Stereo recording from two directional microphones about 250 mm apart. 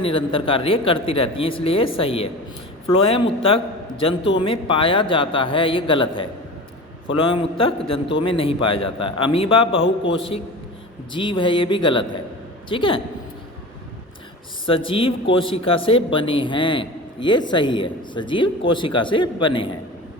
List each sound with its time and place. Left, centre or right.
0.0 s a man's voice: left
14.7 s a man's voice: left